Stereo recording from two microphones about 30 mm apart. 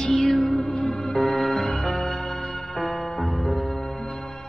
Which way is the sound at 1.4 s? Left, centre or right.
Centre.